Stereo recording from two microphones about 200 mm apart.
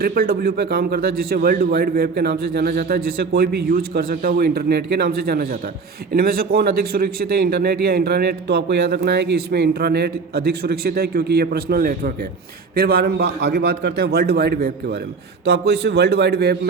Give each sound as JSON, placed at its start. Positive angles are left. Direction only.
{"t": 0.0, "sound": "a man's voice", "side_deg": -50}